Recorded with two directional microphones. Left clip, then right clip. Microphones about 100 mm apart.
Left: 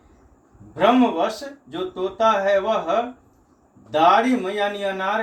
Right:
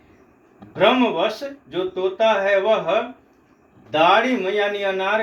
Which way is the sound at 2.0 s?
20° right (ahead or behind).